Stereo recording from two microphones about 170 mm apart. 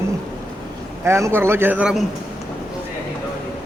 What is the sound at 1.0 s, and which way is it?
A man's voice, 15° right (ahead or behind).